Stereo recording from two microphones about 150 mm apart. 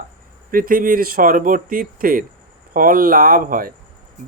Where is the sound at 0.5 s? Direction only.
70° right (ahead or behind).